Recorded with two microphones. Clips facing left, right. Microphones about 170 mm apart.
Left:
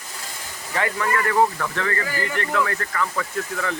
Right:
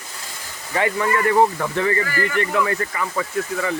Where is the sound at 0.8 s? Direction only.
20° right (ahead or behind).